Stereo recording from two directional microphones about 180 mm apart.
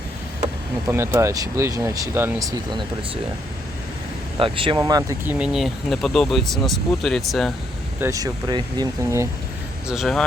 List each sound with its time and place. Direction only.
0.9 s speech: 15° right (ahead or behind)
4.4 s speech: 30° right (ahead or behind); by 7.5 s centre (ahead or behind)
8.0 s speech: 20° right (ahead or behind)
9.9 s speech: centre (ahead or behind)